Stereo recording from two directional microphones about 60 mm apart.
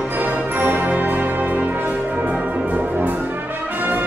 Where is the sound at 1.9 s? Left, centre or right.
Right.